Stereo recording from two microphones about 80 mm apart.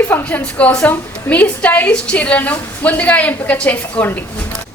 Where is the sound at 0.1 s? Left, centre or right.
Centre.